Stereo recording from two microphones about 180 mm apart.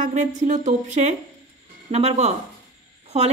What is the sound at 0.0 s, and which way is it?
Speech, 40° right (ahead or behind).